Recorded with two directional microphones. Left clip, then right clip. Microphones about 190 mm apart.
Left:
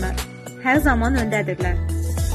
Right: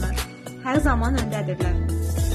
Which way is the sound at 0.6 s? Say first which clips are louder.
Left 4 dB; 15° left (ahead or behind).